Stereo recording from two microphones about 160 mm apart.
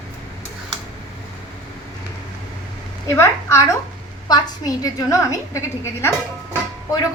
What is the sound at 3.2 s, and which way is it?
A woman's voice, 15° left (ahead or behind).